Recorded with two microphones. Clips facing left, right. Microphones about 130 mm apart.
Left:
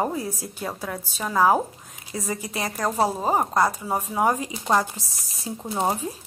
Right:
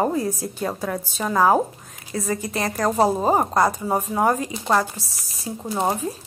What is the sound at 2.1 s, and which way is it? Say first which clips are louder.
A woman's voice: right 4 dB; 15° left (ahead or behind).